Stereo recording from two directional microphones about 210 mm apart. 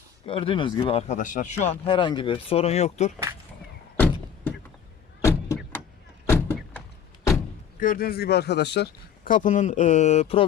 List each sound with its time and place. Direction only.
0.3 s speech: 25° left (ahead or behind)
3.9 s vehicle: 10° left (ahead or behind)
6.2 s door: 10° left (ahead or behind)
7.8 s speech: 45° left (ahead or behind)